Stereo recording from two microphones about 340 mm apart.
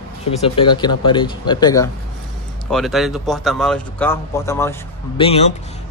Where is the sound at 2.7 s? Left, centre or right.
Centre.